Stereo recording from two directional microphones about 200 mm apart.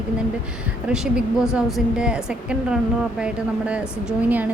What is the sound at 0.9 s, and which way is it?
A woman's voice, 5° right (ahead or behind).